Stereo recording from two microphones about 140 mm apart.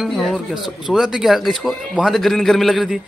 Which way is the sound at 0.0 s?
Centre (ahead or behind).